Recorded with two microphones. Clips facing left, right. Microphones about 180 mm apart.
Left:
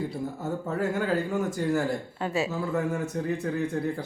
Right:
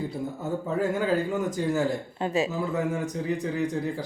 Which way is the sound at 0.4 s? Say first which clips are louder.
Right 2 dB; 20° right (ahead or behind).